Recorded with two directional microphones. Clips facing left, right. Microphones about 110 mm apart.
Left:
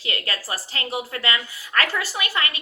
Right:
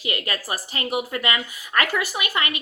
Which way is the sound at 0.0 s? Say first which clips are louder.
Right 2 dB; 20° right (ahead or behind).